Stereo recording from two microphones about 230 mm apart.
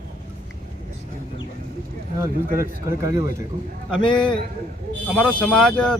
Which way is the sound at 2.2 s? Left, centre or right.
Centre.